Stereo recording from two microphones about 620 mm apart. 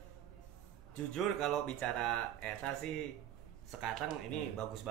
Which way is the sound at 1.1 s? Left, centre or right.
Centre.